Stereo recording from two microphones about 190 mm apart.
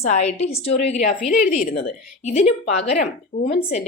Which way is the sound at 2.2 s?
35° left (ahead or behind).